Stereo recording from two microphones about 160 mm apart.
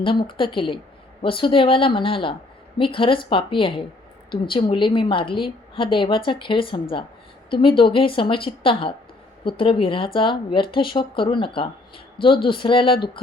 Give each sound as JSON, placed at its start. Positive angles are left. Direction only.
{"t": 0.0, "sound": "speech", "side_deg": 30}